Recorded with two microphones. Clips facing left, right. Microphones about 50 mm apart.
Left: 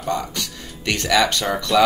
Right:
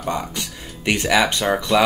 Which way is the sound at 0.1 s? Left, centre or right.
Centre.